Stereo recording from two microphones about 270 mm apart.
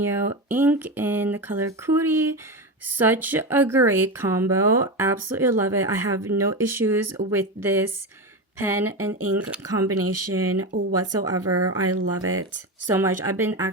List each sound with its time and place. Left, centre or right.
0.0 s speech: centre
9.9 s speech: right
12.9 s speech: centre